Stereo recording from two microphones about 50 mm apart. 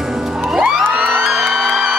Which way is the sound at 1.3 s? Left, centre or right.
Centre.